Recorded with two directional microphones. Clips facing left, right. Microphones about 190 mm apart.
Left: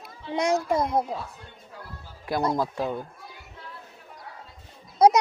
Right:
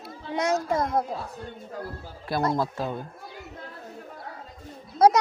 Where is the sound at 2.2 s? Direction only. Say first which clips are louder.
Even; 15° left (ahead or behind).